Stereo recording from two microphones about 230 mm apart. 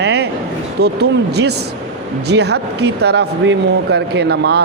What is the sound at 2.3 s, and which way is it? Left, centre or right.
A man's voice, right.